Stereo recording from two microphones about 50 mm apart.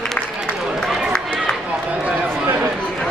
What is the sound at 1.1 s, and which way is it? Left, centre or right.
Run, centre.